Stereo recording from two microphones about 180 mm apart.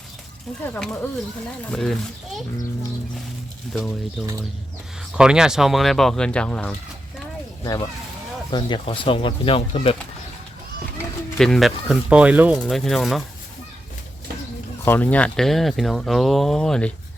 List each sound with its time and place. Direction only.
0.6 s speech: 5° left (ahead or behind)
3.7 s speech: centre (ahead or behind)
5.1 s speech: 5° right (ahead or behind)
7.6 s speech: 20° left (ahead or behind)
11.3 s speech: centre (ahead or behind)
14.8 s speech: 10° left (ahead or behind)